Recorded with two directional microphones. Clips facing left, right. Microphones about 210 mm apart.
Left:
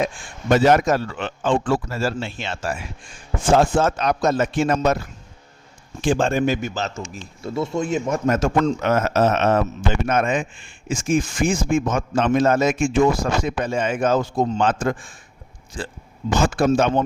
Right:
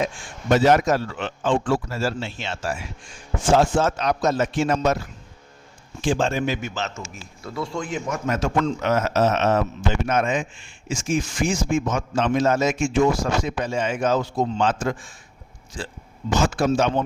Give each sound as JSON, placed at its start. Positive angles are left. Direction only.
{"t": 0.5, "sound": "a man's voice", "side_deg": 55}
{"t": 6.1, "sound": "a man's voice", "side_deg": 55}
{"t": 7.4, "sound": "speech", "side_deg": 25}
{"t": 8.3, "sound": "a man's voice", "side_deg": 45}